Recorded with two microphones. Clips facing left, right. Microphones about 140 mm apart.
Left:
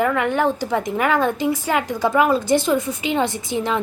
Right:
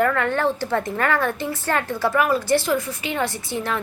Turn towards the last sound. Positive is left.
turn(degrees=20)  # may be behind; listen again after turning